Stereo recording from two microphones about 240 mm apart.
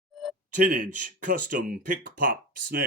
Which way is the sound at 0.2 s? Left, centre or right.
Centre.